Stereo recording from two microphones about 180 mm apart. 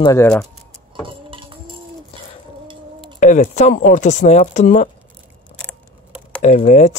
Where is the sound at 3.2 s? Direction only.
45° left (ahead or behind).